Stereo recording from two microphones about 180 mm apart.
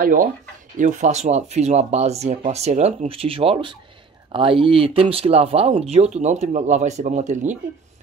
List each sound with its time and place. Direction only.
0.0 s speech: 50° right (ahead or behind)